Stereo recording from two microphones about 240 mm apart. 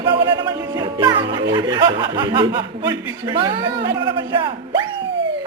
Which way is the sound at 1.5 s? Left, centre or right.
Centre.